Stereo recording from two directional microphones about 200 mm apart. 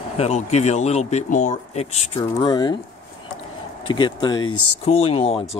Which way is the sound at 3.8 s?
25° left (ahead or behind).